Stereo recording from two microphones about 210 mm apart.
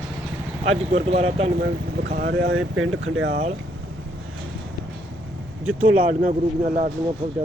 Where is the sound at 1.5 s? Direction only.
50° right (ahead or behind); by 3.3 s 65° right (ahead or behind).